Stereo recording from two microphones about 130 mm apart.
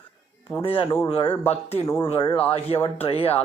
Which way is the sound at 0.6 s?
45° left (ahead or behind).